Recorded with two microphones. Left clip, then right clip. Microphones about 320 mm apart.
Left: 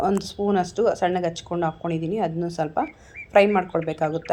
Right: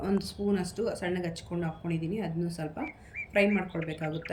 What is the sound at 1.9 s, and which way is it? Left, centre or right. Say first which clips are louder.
Speech: left 10 dB; centre.